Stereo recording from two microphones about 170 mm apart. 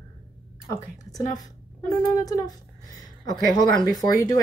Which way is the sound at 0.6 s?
20° left (ahead or behind).